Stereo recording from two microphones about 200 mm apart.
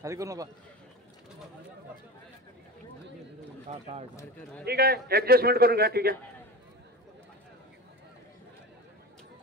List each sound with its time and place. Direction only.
0.0 s a man's voice: 15° right (ahead or behind)
3.7 s speech: 35° right (ahead or behind)
4.6 s a man's voice: 50° right (ahead or behind)